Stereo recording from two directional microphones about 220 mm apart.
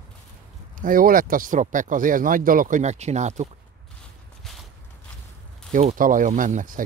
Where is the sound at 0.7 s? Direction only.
40° right (ahead or behind).